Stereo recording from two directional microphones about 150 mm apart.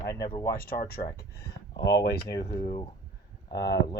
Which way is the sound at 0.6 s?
75° left (ahead or behind).